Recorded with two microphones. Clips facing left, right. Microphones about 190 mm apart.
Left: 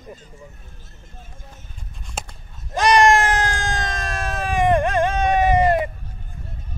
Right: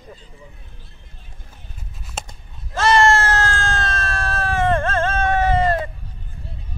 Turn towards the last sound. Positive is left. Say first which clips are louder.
# left 2 dB
turn(degrees=15)  # may be behind; listen again after turning